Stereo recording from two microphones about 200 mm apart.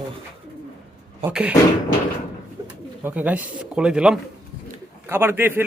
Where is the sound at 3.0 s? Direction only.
10° right (ahead or behind).